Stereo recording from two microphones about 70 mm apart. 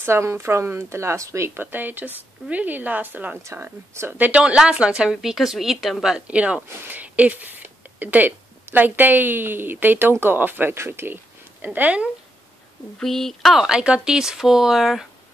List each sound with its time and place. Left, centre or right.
0.0 s speech: right
1.6 s speech: right
3.4 s speech: right
4.2 s a woman's voice: centre
6.1 s a woman's voice: centre
13.0 s speech: centre
13.7 s a woman's voice: centre